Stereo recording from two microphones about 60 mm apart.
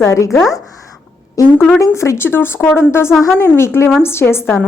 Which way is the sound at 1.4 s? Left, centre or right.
Left.